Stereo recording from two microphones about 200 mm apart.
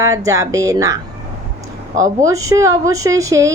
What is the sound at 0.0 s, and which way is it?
Speech, 15° right (ahead or behind).